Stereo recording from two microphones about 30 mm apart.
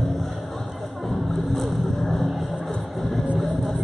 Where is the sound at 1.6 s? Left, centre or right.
Centre.